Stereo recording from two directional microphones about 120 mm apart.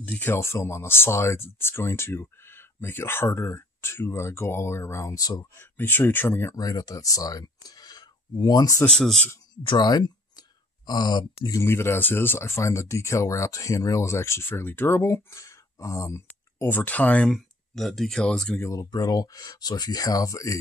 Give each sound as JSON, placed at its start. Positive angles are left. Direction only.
{"t": 0.0, "sound": "speech", "side_deg": 15}
{"t": 5.8, "sound": "speech", "side_deg": 15}
{"t": 8.8, "sound": "speech", "side_deg": 5}
{"t": 9.6, "sound": "speech", "side_deg": 40}
{"t": 11.6, "sound": "speech", "side_deg": 20}
{"t": 18.6, "sound": "speech", "side_deg": 30}